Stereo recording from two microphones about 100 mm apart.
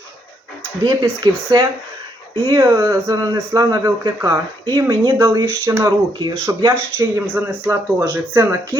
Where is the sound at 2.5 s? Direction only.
25° right (ahead or behind).